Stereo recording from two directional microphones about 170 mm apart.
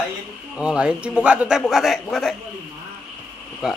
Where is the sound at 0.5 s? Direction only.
5° right (ahead or behind).